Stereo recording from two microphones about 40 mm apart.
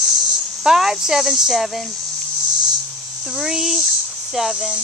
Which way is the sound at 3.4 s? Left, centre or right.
Centre.